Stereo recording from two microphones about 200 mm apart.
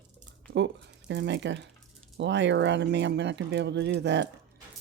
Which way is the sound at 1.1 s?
60° right (ahead or behind).